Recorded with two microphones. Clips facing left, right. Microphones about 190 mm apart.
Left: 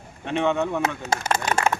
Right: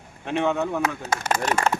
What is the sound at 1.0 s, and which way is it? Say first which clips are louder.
Speech: left 1 dB; 30° left (ahead or behind).